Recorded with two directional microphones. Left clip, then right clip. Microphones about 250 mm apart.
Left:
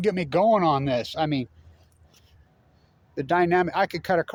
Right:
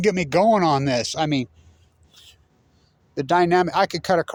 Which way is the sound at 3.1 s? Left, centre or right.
Right.